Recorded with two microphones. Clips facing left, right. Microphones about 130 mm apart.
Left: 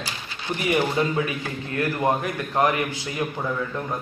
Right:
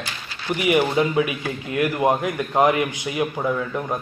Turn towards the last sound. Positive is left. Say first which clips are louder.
# right 4 dB
turn(degrees=-20)  # may be behind; listen again after turning